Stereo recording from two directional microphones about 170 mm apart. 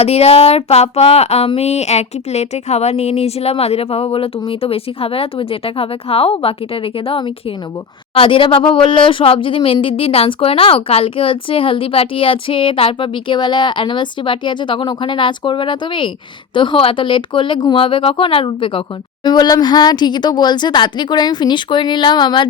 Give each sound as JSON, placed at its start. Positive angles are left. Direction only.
{"t": 0.0, "sound": "a woman's voice", "side_deg": 35}